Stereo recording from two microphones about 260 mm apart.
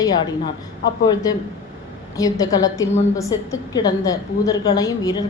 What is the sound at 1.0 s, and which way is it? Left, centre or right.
A woman's voice, centre.